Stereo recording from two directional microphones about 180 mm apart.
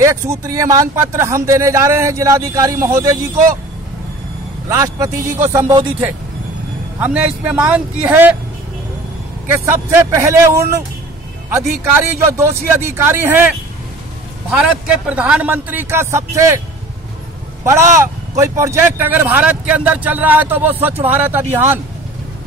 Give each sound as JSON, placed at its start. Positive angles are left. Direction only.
{"t": 0.0, "sound": "speech", "side_deg": -15}
{"t": 4.6, "sound": "speech", "side_deg": -20}
{"t": 9.7, "sound": "speech", "side_deg": -15}
{"t": 14.5, "sound": "speech", "side_deg": -5}
{"t": 17.9, "sound": "speech", "side_deg": -15}